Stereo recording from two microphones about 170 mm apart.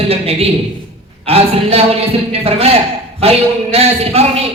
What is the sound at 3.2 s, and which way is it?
Speech, 35° right (ahead or behind).